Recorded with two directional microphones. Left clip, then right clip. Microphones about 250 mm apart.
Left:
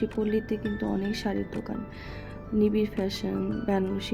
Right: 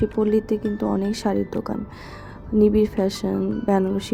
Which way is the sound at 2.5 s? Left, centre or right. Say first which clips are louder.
Right 8 dB; centre.